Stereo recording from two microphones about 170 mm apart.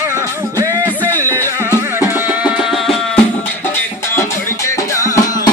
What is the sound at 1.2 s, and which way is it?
Music, 15° right (ahead or behind).